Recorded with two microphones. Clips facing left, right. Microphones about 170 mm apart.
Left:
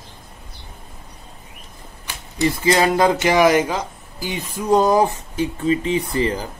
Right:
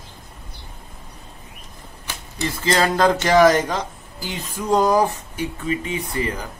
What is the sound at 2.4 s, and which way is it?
Speech, 15° left (ahead or behind).